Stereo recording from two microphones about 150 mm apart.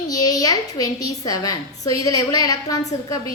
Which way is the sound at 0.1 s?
25° left (ahead or behind).